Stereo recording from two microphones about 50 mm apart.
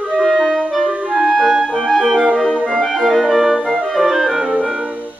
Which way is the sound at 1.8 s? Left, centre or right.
Centre.